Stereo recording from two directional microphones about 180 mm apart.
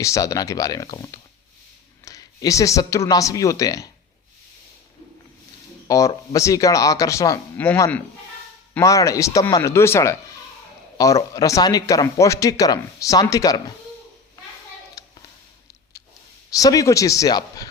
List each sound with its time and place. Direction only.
0.0 s a man's voice: 20° left (ahead or behind)
5.9 s a man's voice: 20° left (ahead or behind)
15.0 s a sound: 20° left (ahead or behind)
16.5 s a man's voice: 20° left (ahead or behind)